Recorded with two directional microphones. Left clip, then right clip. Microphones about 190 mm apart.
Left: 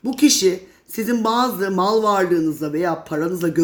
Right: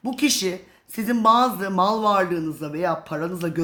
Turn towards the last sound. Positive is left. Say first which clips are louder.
# left 6 dB
turn(degrees=-15)  # may be behind; listen again after turning